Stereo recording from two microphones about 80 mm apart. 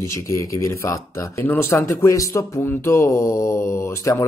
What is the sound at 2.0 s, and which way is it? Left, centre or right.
Speech, left.